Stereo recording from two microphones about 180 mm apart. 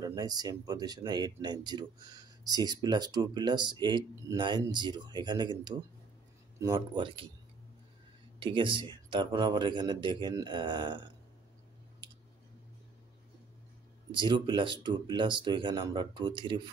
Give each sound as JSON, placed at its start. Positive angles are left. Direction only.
{"t": 0.0, "sound": "speech", "side_deg": -20}
{"t": 8.4, "sound": "speech", "side_deg": -25}
{"t": 14.1, "sound": "speech", "side_deg": -25}